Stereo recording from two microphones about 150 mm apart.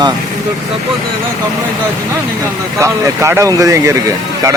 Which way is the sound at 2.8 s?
20° right (ahead or behind).